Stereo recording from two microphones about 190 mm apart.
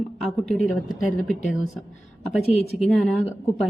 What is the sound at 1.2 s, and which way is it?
Speech, centre (ahead or behind).